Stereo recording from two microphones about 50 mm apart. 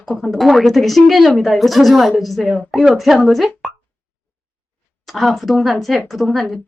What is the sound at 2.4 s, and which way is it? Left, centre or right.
Speech, left.